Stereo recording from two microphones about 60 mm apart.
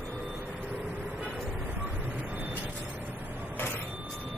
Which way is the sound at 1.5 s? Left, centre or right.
Right.